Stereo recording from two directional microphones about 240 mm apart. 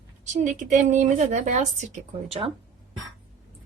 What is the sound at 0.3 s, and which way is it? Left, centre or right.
A woman's voice, right.